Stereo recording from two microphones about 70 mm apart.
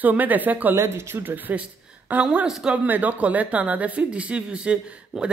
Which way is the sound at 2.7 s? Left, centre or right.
Right.